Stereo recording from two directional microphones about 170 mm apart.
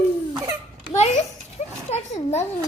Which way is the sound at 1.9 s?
40° left (ahead or behind).